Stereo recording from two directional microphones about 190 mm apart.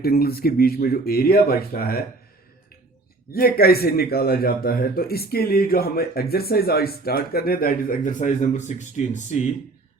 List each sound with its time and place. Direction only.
0.0 s a man's voice: 55° left (ahead or behind)
3.3 s a man's voice: 50° left (ahead or behind)